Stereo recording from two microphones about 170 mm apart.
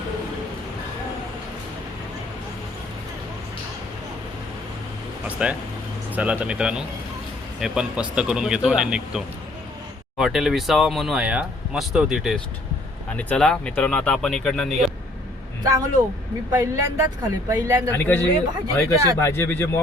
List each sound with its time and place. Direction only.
5.4 s speech: 5° right (ahead or behind)
15.6 s speech: 20° right (ahead or behind)
17.9 s speech: 10° left (ahead or behind)